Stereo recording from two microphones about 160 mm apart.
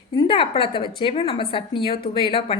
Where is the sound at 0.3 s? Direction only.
35° left (ahead or behind).